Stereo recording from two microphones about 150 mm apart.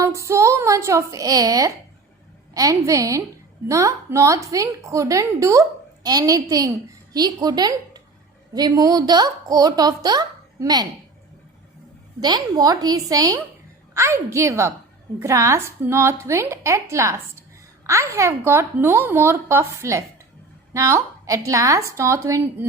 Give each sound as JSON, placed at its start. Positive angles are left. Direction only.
{"t": 0.0, "sound": "a woman's voice", "side_deg": -20}
{"t": 12.2, "sound": "a woman's voice", "side_deg": -25}